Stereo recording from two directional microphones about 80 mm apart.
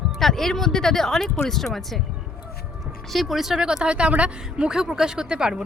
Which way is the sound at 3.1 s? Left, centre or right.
Centre.